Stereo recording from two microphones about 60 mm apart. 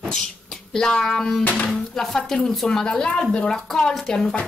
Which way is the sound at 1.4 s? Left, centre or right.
Left.